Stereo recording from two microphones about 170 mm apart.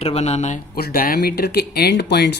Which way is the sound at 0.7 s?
60° left (ahead or behind).